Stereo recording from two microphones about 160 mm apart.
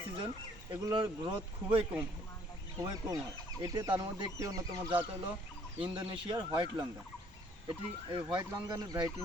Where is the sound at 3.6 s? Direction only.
25° right (ahead or behind).